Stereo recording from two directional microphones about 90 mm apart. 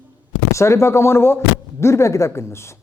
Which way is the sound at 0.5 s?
30° left (ahead or behind).